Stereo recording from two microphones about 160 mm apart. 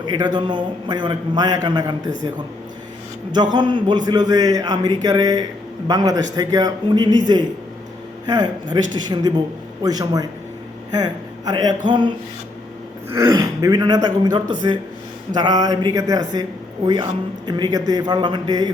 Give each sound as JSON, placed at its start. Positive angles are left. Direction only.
{"t": 0.0, "sound": "a man's voice", "side_deg": -25}
{"t": 3.3, "sound": "a man's voice", "side_deg": -30}